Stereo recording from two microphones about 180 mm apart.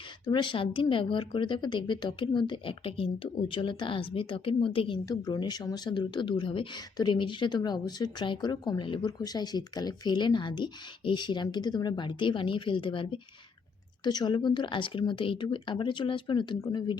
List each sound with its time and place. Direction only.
0.3 s speech: 25° left (ahead or behind)